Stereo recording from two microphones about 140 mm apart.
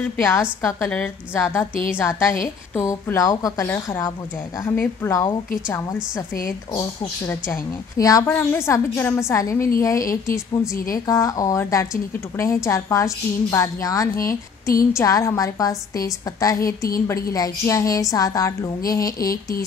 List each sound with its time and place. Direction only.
0.2 s a woman's voice: 15° left (ahead or behind)